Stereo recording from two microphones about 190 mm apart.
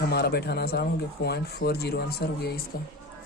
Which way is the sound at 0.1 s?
60° left (ahead or behind).